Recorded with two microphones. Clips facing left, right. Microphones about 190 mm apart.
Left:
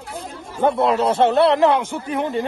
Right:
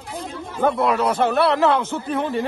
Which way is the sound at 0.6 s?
25° left (ahead or behind).